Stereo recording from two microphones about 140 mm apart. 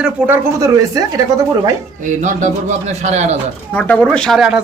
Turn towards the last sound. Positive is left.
turn(degrees=-5)  # may be behind; listen again after turning